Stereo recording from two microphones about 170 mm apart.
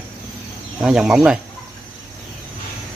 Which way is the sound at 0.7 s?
5° right (ahead or behind).